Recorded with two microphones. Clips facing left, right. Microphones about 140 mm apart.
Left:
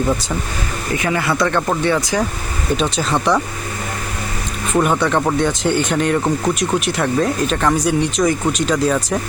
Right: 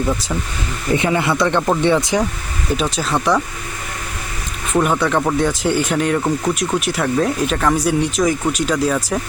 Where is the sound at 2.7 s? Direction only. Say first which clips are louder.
Left 1 dB; centre (ahead or behind).